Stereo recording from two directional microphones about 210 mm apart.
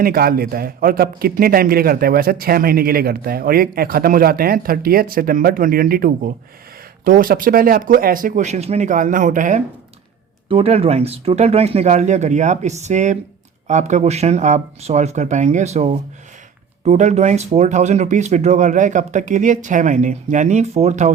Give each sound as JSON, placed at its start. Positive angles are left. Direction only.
{"t": 0.0, "sound": "a man's voice", "side_deg": -45}